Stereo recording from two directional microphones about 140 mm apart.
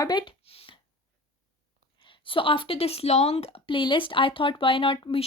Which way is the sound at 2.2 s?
40° left (ahead or behind).